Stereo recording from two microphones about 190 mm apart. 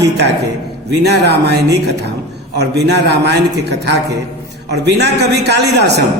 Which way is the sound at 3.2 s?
65° right (ahead or behind).